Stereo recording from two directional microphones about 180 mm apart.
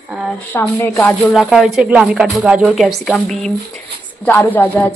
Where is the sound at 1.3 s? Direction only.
Centre (ahead or behind).